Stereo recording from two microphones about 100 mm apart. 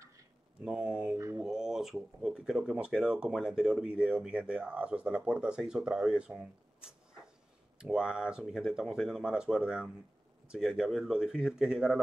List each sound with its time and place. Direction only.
0.6 s speech: 10° right (ahead or behind)
1.1 s mantra: 30° right (ahead or behind)
1.4 s speech: 5° right (ahead or behind)